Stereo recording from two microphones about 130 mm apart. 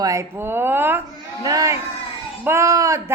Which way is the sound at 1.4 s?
25° right (ahead or behind).